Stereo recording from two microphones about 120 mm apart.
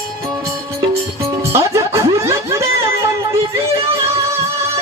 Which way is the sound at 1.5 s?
25° right (ahead or behind).